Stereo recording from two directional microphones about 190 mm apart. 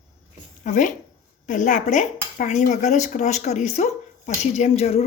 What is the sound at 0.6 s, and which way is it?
Speech, 40° left (ahead or behind).